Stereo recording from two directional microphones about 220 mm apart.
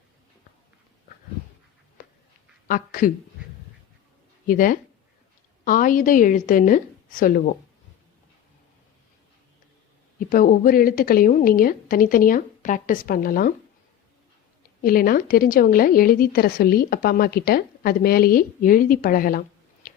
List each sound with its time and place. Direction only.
2.6 s speech: 40° left (ahead or behind)
4.4 s a woman's voice: 40° left (ahead or behind)
10.2 s a woman's voice: 40° left (ahead or behind)
14.8 s a woman's voice: 40° left (ahead or behind)